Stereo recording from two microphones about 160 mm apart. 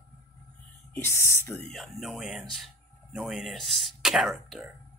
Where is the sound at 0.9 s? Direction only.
15° left (ahead or behind).